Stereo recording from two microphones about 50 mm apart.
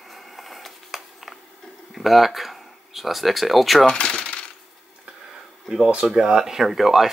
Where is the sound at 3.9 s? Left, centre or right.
Centre.